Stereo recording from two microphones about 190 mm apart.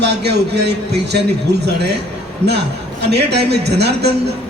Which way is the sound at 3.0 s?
60° right (ahead or behind).